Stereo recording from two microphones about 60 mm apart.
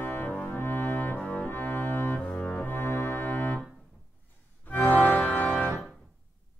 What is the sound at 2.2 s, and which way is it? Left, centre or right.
Music, centre.